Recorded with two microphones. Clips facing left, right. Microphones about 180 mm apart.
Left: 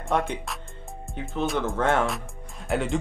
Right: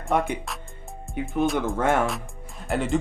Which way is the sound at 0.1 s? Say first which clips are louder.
Right 2 dB; 5° right (ahead or behind).